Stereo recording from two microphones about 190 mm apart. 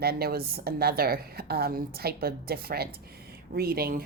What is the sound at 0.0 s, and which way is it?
A woman's voice, 55° right (ahead or behind).